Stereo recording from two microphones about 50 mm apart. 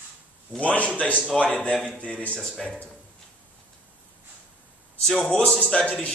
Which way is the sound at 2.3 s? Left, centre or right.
Centre.